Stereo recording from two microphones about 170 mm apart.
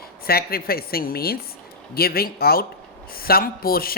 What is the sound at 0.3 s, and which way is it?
Speech, 65° left (ahead or behind).